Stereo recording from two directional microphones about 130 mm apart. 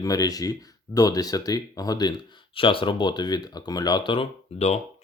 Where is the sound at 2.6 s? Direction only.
40° left (ahead or behind).